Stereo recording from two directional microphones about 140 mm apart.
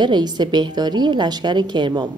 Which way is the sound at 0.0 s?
30° right (ahead or behind).